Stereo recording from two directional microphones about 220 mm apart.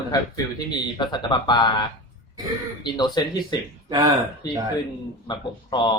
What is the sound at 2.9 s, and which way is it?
Speech, 20° left (ahead or behind).